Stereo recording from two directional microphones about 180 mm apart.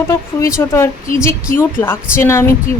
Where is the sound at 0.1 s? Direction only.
15° left (ahead or behind).